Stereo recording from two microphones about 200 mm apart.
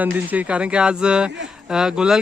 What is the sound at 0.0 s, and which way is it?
Speech, 10° right (ahead or behind).